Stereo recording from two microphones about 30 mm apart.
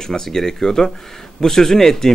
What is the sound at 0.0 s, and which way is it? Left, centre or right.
Speech, centre.